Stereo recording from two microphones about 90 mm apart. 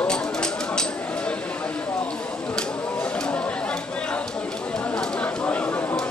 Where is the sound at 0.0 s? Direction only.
10° left (ahead or behind).